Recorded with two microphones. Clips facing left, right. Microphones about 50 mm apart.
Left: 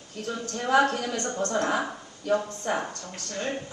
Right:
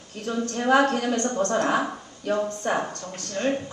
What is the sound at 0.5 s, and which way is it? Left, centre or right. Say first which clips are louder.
A woman's voice: right 2 dB; right.